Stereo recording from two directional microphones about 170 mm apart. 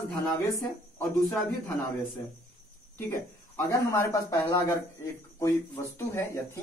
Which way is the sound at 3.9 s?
15° left (ahead or behind).